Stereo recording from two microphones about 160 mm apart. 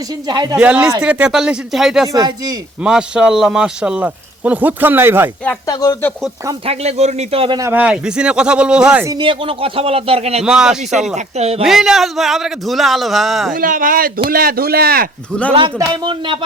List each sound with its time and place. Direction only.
0.3 s speech: 25° right (ahead or behind)
0.5 s a man's voice: 5° right (ahead or behind)
2.1 s speech: 25° right (ahead or behind)
2.8 s speech: 5° right (ahead or behind)
5.6 s speech: 20° left (ahead or behind)
6.7 s speech: 40° right (ahead or behind)
7.6 s speech: 10° right (ahead or behind)
9.0 s speech: 30° right (ahead or behind)
10.4 s a man's voice: 5° right (ahead or behind)
11.1 s speech: 40° right (ahead or behind)
11.6 s a man's voice: centre (ahead or behind)
13.6 s speech: 60° right (ahead or behind)
15.3 s a man's voice: 10° left (ahead or behind)
15.8 s speech: 30° right (ahead or behind)